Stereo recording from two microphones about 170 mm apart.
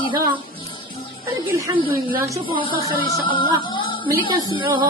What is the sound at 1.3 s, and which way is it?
Speech, 20° right (ahead or behind).